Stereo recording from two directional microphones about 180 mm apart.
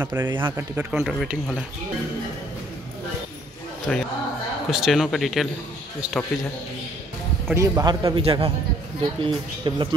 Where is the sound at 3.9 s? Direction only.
5° left (ahead or behind).